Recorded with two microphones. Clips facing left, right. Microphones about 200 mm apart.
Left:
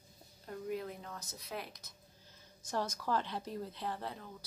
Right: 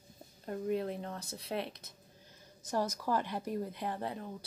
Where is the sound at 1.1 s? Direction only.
30° right (ahead or behind).